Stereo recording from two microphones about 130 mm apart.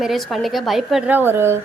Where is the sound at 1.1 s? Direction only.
15° right (ahead or behind).